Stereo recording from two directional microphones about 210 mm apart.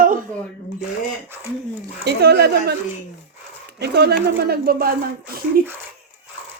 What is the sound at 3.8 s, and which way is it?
Speech, 50° right (ahead or behind).